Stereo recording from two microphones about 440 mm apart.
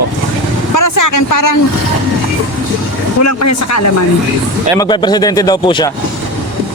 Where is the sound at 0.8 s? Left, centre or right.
Left.